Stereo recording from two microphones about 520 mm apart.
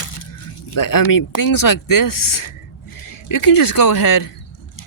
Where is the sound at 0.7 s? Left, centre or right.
Left.